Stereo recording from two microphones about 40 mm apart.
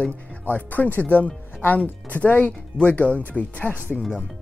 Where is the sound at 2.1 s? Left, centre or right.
Left.